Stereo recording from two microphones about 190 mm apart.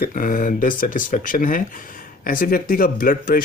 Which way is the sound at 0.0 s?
45° left (ahead or behind).